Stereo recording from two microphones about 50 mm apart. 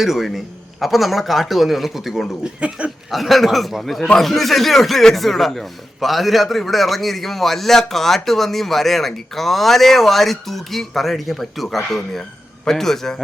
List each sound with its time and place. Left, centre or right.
0.0 s a man's voice: centre
2.4 s speech: right
3.1 s a man's voice: centre